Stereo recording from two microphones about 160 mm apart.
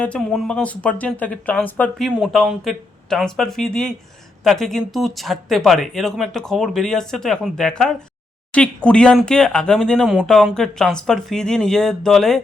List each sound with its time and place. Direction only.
0.0 s speech: 5° left (ahead or behind)
2.0 s speech: 5° right (ahead or behind)